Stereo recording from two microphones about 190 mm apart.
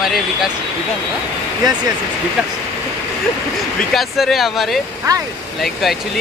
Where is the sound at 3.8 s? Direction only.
Centre (ahead or behind).